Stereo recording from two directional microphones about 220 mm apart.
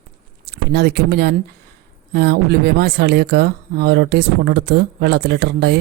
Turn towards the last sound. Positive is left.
turn(degrees=-50)  # may be behind; listen again after turning